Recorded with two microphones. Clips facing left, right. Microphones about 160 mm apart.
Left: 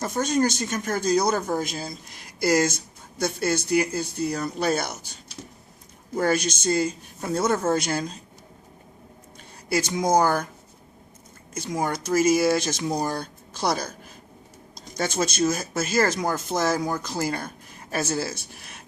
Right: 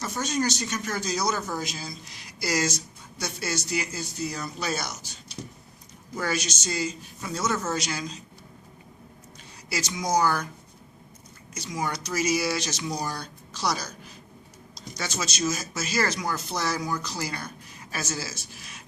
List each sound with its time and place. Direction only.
0.0 s speech: 50° left (ahead or behind)
6.1 s speech: 55° left (ahead or behind)
9.6 s speech: 50° left (ahead or behind)
11.5 s speech: 50° left (ahead or behind)